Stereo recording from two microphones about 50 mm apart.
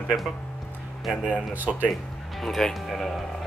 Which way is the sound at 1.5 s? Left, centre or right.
Right.